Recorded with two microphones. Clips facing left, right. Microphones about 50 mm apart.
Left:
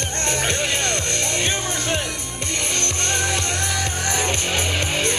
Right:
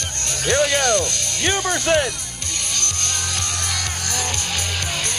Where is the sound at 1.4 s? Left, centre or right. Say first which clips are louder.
Right 4 dB; right.